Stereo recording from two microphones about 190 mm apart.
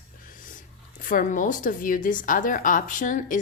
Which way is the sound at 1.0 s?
45° left (ahead or behind).